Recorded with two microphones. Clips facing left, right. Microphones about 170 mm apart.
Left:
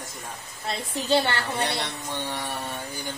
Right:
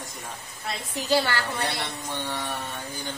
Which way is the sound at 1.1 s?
25° left (ahead or behind).